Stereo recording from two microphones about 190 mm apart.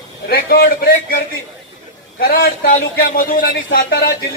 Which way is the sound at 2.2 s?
50° left (ahead or behind).